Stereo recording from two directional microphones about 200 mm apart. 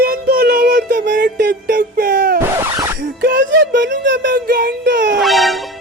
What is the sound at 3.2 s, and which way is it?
Music, 60° right (ahead or behind).